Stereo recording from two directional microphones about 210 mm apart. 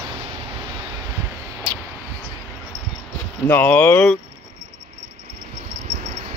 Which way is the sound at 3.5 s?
10° left (ahead or behind).